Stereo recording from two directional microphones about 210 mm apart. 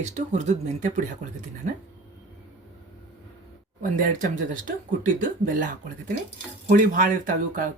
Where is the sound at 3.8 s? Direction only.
40° right (ahead or behind).